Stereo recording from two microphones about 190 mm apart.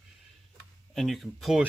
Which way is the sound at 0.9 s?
Centre (ahead or behind).